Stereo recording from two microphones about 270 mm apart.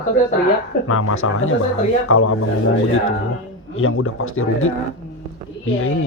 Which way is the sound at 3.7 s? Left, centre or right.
Left.